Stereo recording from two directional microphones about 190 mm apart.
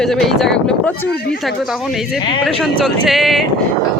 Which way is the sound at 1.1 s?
55° left (ahead or behind).